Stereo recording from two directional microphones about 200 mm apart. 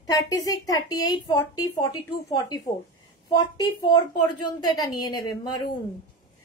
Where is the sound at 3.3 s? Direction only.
20° left (ahead or behind).